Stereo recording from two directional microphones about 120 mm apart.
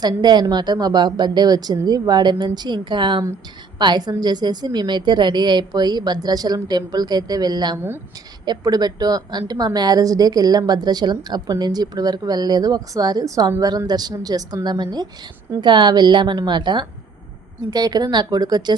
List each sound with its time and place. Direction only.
0.0 s a woman's voice: 35° right (ahead or behind)